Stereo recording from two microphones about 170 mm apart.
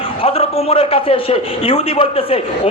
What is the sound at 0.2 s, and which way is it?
A man's voice, 35° left (ahead or behind).